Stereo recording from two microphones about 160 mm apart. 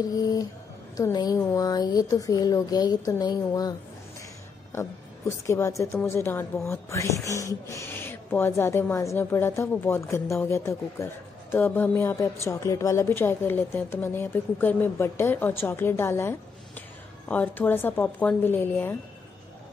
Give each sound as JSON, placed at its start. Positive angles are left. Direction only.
{"t": 0.1, "sound": "speech", "side_deg": 25}
{"t": 5.5, "sound": "speech", "side_deg": 20}